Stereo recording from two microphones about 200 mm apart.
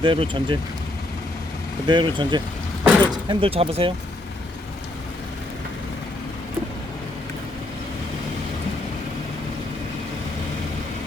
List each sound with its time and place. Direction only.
0.0 s speech: 25° right (ahead or behind)
1.9 s speech: 25° right (ahead or behind)